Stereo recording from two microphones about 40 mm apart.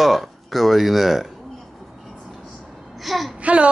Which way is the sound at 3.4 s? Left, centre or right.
Right.